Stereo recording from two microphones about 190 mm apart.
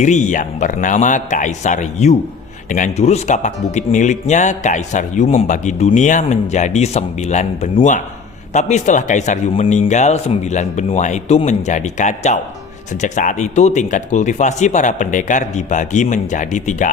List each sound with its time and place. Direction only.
0.0 s speech: 40° left (ahead or behind)